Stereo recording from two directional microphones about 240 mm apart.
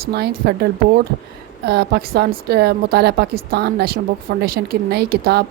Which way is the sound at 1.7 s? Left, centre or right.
Right.